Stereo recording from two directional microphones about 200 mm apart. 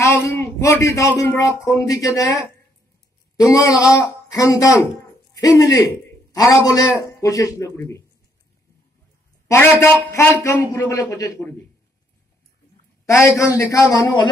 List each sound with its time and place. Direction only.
0.0 s a man's voice: 15° left (ahead or behind)
9.5 s a man's voice: 10° left (ahead or behind)
13.0 s a man's voice: 15° left (ahead or behind)